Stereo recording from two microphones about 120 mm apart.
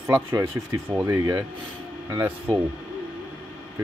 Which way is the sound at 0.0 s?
20° right (ahead or behind).